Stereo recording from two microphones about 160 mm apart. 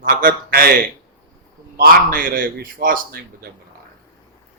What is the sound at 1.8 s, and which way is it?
A man's voice, 60° right (ahead or behind).